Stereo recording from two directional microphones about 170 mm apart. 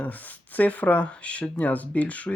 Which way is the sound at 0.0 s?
10° left (ahead or behind).